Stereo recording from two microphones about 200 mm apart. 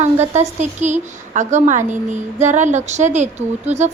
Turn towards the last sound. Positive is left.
turn(degrees=-35)  # may be behind; listen again after turning